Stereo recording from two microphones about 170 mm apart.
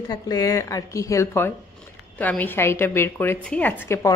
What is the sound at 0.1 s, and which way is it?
A woman's voice, 20° left (ahead or behind).